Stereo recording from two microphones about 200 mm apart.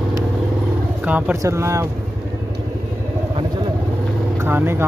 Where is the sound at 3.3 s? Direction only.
25° right (ahead or behind).